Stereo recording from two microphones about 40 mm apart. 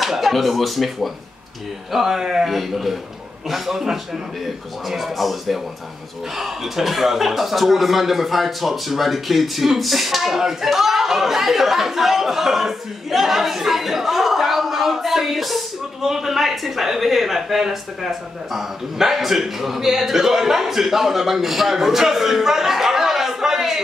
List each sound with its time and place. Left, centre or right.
0.0 s a man's voice: centre